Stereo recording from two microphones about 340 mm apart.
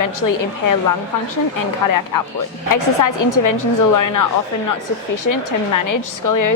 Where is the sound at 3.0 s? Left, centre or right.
Left.